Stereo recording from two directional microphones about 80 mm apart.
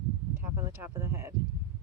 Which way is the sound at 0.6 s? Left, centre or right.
Right.